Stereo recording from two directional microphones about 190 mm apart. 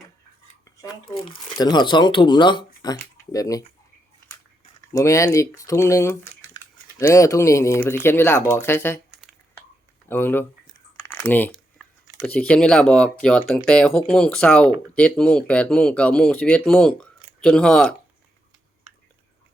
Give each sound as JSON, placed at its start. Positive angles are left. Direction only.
{"t": 0.6, "sound": "dishes", "side_deg": 20}
{"t": 1.5, "sound": "speech", "side_deg": 20}
{"t": 4.9, "sound": "speech", "side_deg": 15}
{"t": 10.1, "sound": "speech", "side_deg": 10}